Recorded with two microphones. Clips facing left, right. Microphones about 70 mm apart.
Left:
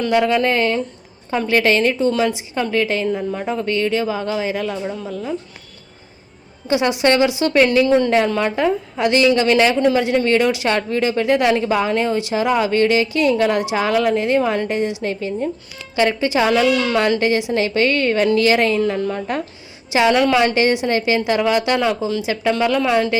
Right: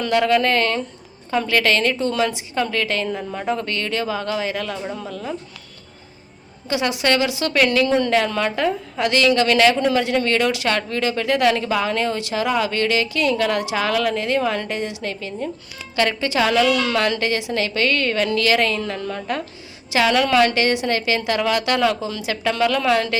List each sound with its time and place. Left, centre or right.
0.1 s a woman's voice: centre
3.1 s a woman's voice: centre
4.8 s speech: centre
6.7 s speech: left
7.9 s a woman's voice: centre
17.2 s a woman's voice: left